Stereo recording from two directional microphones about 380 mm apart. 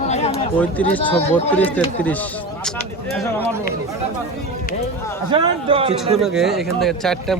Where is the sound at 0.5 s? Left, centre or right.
Centre.